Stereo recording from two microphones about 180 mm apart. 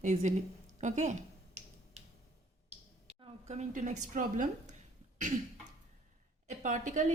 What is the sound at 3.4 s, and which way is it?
Speech, 40° right (ahead or behind).